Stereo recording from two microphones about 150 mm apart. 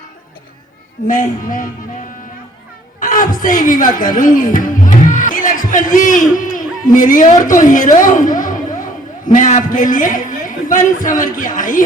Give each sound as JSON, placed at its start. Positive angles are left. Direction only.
{"t": 1.0, "sound": "a man's voice", "side_deg": 65}
{"t": 3.0, "sound": "a man's voice", "side_deg": 65}